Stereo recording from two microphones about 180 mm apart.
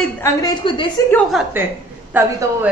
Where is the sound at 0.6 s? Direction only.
25° left (ahead or behind).